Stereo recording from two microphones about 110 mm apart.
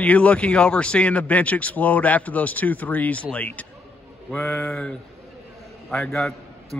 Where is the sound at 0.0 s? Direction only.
15° left (ahead or behind).